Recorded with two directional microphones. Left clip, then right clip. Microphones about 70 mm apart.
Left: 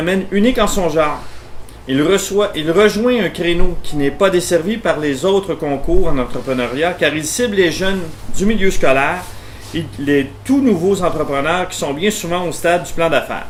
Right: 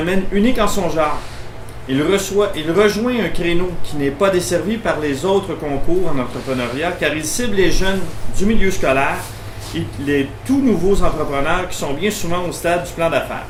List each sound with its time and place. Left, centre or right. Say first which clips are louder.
0.0 s speech: left 2 dB; left